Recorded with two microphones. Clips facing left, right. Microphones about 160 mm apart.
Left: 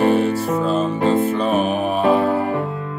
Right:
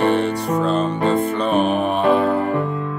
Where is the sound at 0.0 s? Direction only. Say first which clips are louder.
Left 2 dB; 5° left (ahead or behind).